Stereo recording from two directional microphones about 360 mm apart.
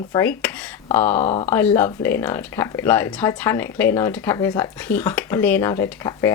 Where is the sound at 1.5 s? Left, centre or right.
Centre.